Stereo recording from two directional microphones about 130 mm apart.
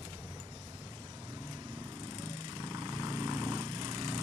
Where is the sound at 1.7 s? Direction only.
35° right (ahead or behind).